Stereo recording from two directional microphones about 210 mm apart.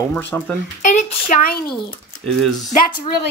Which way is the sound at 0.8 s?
35° left (ahead or behind).